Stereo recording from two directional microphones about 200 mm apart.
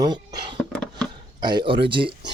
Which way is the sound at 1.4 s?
20° right (ahead or behind).